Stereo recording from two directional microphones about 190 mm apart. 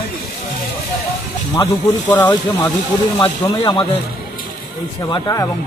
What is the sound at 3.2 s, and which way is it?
Speech, 20° left (ahead or behind).